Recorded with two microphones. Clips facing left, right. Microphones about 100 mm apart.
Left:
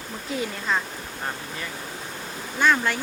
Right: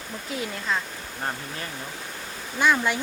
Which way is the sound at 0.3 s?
Centre (ahead or behind).